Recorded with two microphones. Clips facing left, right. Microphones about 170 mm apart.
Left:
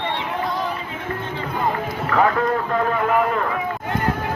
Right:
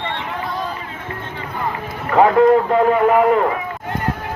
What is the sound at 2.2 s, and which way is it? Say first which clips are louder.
Speech: right 8 dB; 20° right (ahead or behind).